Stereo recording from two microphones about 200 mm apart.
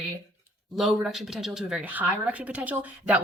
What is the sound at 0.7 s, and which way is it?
Speech, centre (ahead or behind).